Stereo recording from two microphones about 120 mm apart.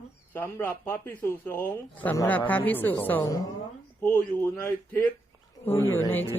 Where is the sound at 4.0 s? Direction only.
15° left (ahead or behind).